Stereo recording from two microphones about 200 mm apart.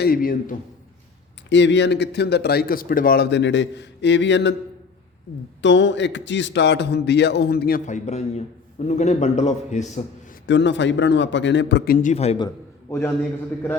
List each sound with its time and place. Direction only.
0.0 s a man's voice: 45° left (ahead or behind)
1.5 s speech: 65° left (ahead or behind)
5.6 s a man's voice: 65° left (ahead or behind); by 10.0 s 35° left (ahead or behind)
10.4 s speech: 60° left (ahead or behind)
12.0 s a man's voice: 30° left (ahead or behind)
12.5 s a sound: 15° left (ahead or behind)